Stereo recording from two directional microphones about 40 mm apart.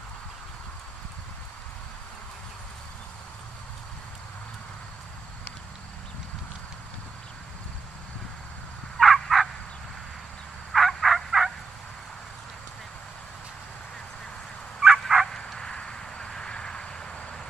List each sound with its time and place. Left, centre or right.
8.9 s a sound: centre
10.7 s fowl: centre
14.8 s dog: centre
15.6 s vehicle: left